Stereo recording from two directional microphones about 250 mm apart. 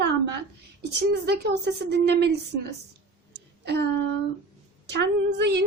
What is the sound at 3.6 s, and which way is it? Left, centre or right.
A woman's voice, right.